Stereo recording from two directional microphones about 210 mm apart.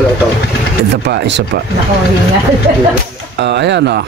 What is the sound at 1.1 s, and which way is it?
Speech, 55° right (ahead or behind).